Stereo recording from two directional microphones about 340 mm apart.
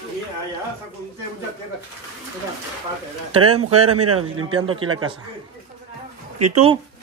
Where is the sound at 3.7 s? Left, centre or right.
Right.